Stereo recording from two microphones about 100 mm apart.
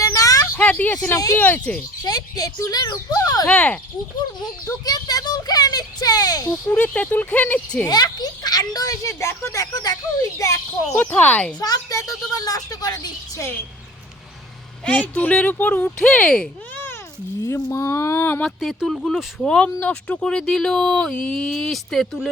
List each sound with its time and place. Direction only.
0.0 s a sound: 35° left (ahead or behind)
0.5 s a sound: 15° left (ahead or behind)
1.1 s a woman's voice: 35° left (ahead or behind)
1.4 s speech: 20° left (ahead or behind)
2.0 s a woman's voice: 40° left (ahead or behind)
3.4 s speech: 10° left (ahead or behind)
4.6 s a sound: 40° left (ahead or behind)
6.5 s speech: 15° left (ahead or behind)
7.9 s a sound: 40° left (ahead or behind)
10.9 s speech: 15° left (ahead or behind)
11.6 s a woman's voice: 35° left (ahead or behind)
14.8 s speech: 15° left (ahead or behind)
17.4 s speech: 30° left (ahead or behind)
18.4 s speech: centre (ahead or behind)